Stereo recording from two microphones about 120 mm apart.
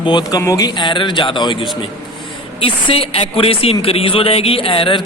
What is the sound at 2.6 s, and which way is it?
A man's voice, 50° left (ahead or behind).